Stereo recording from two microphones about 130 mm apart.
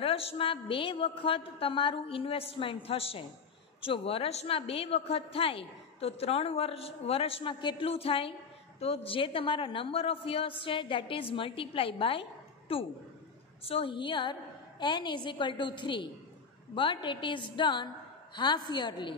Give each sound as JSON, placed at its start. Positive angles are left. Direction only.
{"t": 0.0, "sound": "a woman's voice", "side_deg": 50}